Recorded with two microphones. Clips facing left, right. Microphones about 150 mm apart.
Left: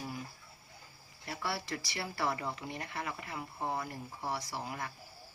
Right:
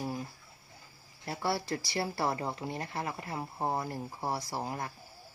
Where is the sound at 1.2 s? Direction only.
35° right (ahead or behind).